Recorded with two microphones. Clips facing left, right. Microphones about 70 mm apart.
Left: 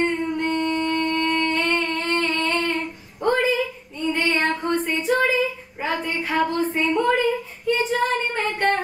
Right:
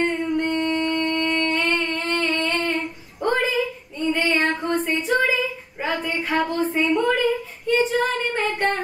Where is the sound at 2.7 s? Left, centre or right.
Centre.